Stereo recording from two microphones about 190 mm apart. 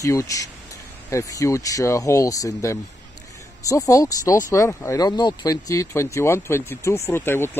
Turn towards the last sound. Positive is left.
turn(degrees=10)  # may be behind; listen again after turning